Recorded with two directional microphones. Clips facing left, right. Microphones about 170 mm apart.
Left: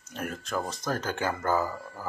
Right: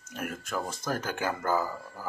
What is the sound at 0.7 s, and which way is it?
Speech, 10° right (ahead or behind).